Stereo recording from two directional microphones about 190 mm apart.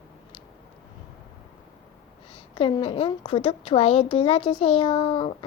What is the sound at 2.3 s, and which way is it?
A woman's voice, 30° left (ahead or behind).